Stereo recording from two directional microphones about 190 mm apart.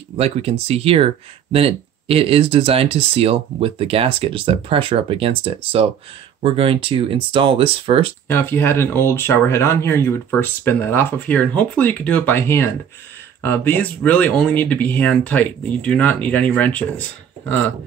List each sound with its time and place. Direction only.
0.2 s speech: 30° right (ahead or behind)
8.3 s speech: 10° left (ahead or behind)